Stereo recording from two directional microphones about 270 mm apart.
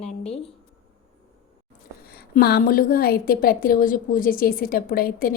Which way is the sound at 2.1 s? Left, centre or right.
Left.